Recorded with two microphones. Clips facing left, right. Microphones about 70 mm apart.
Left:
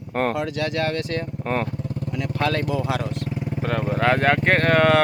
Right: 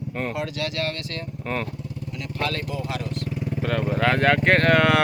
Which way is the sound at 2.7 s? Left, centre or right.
Left.